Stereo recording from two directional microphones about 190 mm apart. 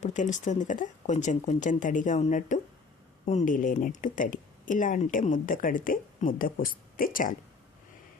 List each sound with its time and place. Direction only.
0.0 s a woman's voice: 40° left (ahead or behind)